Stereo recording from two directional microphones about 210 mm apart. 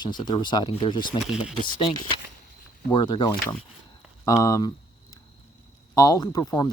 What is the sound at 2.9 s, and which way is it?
Speech, 20° left (ahead or behind).